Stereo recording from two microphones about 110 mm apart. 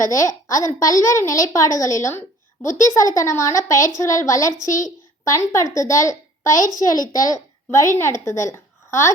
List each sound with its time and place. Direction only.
0.1 s a woman's voice: 30° left (ahead or behind)